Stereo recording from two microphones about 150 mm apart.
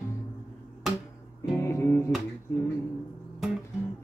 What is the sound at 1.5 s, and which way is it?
Music, 20° left (ahead or behind).